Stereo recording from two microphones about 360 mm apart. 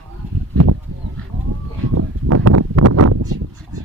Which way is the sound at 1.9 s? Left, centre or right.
Right.